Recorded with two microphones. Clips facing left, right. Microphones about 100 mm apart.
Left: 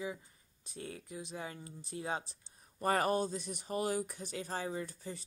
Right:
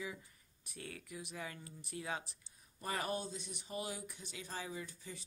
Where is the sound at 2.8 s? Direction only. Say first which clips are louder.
Left 9 dB; 50° left (ahead or behind).